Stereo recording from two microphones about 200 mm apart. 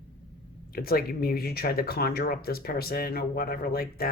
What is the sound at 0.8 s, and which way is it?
Speech, 50° left (ahead or behind).